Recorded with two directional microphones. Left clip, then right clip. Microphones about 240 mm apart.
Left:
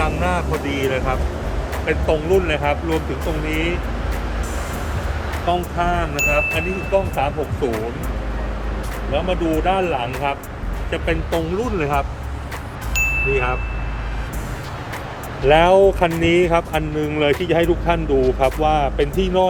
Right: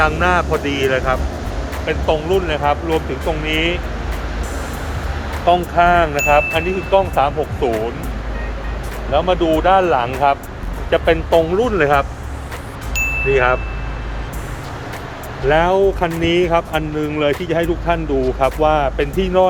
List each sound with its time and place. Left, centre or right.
0.0 s speech: centre
5.5 s speech: centre
9.1 s speech: centre
12.9 s chime: centre
15.4 s speech: centre